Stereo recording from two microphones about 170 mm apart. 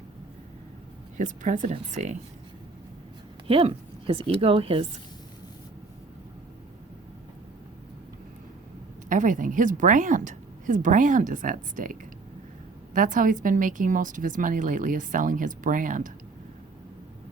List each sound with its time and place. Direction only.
1.1 s a woman's voice: 50° right (ahead or behind)
3.4 s a woman's voice: 35° right (ahead or behind)
9.0 s a woman's voice: 50° right (ahead or behind)